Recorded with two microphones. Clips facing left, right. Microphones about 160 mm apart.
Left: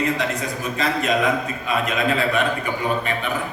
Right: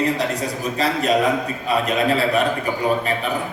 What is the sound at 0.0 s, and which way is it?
A man's voice, 35° right (ahead or behind).